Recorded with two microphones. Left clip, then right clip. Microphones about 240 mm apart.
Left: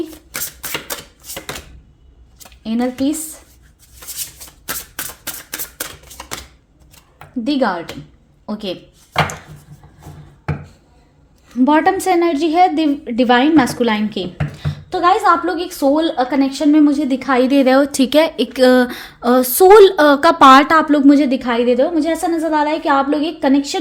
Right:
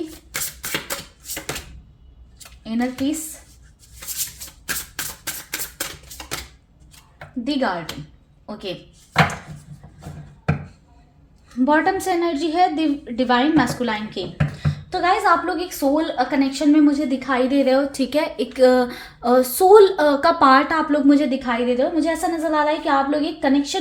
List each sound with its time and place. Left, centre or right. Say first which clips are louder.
0.3 s music: left 1 dB; left
2.6 s speech: left 5 dB; left
4.6 s a sound: left 1 dB; left
7.4 s speech: left 5 dB; left
11.6 s speech: left 5 dB; left